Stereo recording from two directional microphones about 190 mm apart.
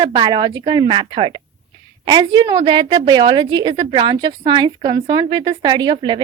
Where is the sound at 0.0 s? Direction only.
25° right (ahead or behind).